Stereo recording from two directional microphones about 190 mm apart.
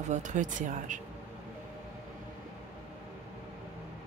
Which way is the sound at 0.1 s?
40° right (ahead or behind).